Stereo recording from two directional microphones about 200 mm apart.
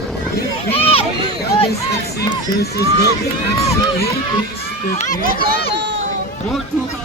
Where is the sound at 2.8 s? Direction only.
55° left (ahead or behind).